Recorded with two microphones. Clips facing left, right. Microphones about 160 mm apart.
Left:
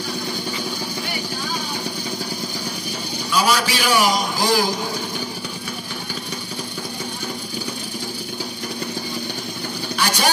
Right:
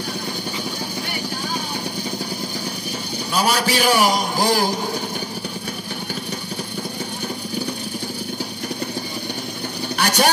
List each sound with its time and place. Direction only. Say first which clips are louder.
3.3 s a man's voice: even; 55° right (ahead or behind)
9.9 s vehicle: right 3 dB; 55° right (ahead or behind)